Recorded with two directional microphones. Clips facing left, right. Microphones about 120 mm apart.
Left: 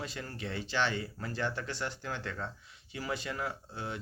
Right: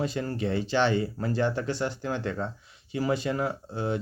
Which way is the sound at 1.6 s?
15° right (ahead or behind).